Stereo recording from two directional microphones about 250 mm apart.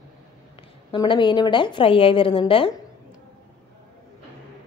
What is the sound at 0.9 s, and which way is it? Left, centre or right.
A woman's voice, centre.